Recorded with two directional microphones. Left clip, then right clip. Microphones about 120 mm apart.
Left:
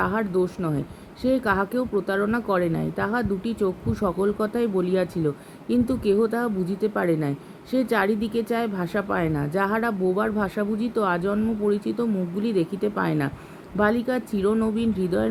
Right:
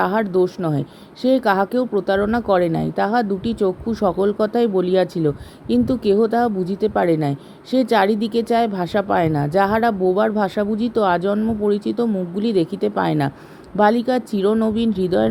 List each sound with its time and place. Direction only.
0.0 s speech: 50° right (ahead or behind)